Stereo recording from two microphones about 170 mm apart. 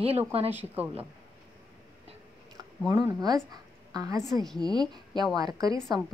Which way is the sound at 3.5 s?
20° right (ahead or behind).